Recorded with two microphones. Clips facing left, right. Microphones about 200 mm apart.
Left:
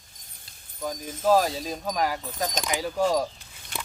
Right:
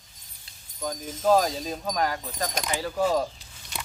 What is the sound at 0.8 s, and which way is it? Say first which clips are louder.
Speech: even; 10° left (ahead or behind).